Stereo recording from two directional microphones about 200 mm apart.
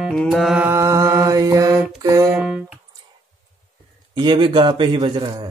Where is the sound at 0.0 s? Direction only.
Centre (ahead or behind); by 1.8 s 20° right (ahead or behind).